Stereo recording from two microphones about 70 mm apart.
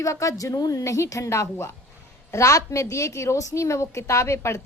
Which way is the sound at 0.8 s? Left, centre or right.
Left.